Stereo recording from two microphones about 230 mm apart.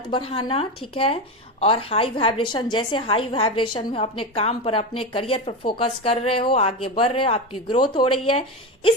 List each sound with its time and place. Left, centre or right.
0.1 s a woman's voice: left